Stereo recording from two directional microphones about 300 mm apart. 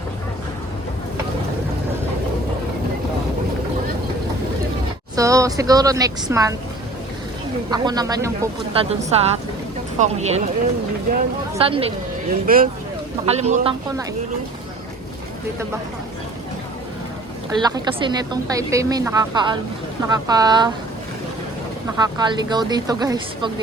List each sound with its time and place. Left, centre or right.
5.1 s a woman's voice: centre
7.7 s a woman's voice: centre
12.5 s speech: right
17.6 s a woman's voice: centre
21.8 s a woman's voice: centre